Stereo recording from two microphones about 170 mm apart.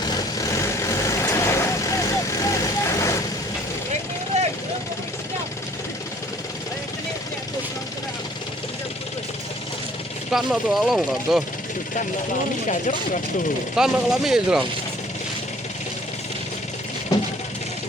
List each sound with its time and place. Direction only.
0.2 s vehicle: 20° left (ahead or behind)
4.3 s vehicle: 40° right (ahead or behind)
10.3 s speech: centre (ahead or behind)
13.7 s speech: 5° right (ahead or behind)